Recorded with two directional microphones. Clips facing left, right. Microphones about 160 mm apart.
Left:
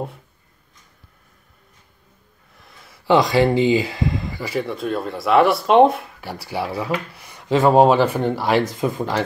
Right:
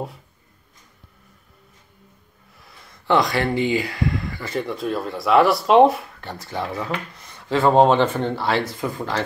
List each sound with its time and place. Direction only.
2.5 s a sound: centre (ahead or behind)
3.1 s speech: 20° left (ahead or behind)
4.5 s speech: centre (ahead or behind); by 9.2 s 15° left (ahead or behind)